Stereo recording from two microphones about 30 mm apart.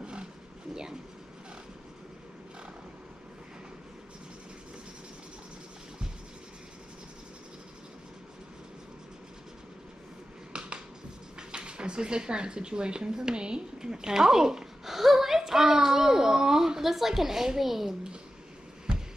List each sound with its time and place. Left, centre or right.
0.0 s roaring cats: right
10.5 s finger snapping: right
11.5 s a child's voice: right; by 17.9 s centre